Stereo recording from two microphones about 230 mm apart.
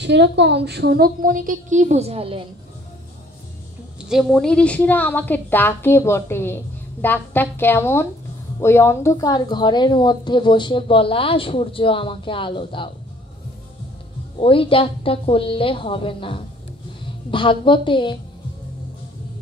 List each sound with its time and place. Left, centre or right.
0.0 s a woman's voice: right
4.0 s a woman's voice: centre; by 12.9 s left
14.4 s a woman's voice: left